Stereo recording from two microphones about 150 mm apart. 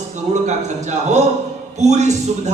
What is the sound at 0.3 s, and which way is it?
A man's voice, 50° right (ahead or behind).